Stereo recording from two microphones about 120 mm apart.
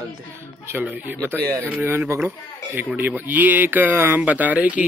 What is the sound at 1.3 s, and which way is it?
Speech, 15° right (ahead or behind).